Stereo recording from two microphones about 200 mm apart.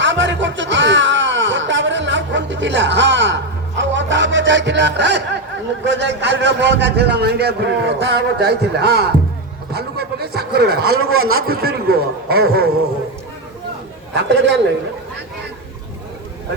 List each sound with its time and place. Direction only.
0.0 s a sound: 65° right (ahead or behind)
5.8 s a man's voice: 60° right (ahead or behind)
11.0 s a man's voice: 90° right
11.4 s a man's voice: 50° right (ahead or behind)
14.2 s a man's voice: 60° right (ahead or behind)